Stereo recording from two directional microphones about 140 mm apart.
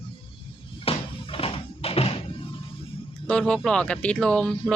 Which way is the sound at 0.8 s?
40° left (ahead or behind).